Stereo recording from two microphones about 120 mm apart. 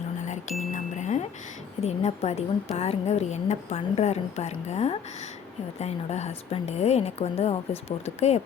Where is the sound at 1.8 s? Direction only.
60° left (ahead or behind).